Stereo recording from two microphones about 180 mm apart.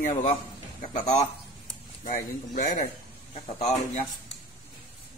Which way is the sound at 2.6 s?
50° left (ahead or behind).